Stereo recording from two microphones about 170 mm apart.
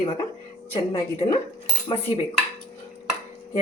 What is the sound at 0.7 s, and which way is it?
Speech, 35° left (ahead or behind).